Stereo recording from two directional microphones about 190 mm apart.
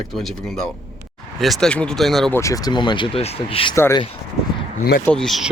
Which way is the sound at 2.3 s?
15° left (ahead or behind).